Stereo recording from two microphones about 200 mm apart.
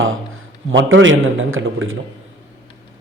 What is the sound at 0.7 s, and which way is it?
A man's voice, 70° right (ahead or behind).